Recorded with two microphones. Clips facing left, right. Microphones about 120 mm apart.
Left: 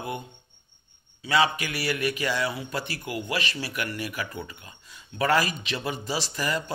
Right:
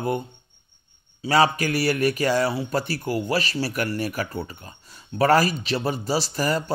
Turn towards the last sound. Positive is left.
turn(degrees=-40)  # may be behind; listen again after turning